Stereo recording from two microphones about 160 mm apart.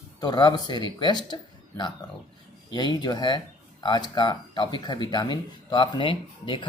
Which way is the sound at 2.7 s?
25° left (ahead or behind).